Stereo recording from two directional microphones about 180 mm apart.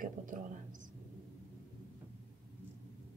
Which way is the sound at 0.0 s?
50° right (ahead or behind).